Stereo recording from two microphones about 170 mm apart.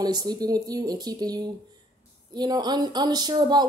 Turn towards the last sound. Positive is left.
turn(degrees=-25)  # may be behind; listen again after turning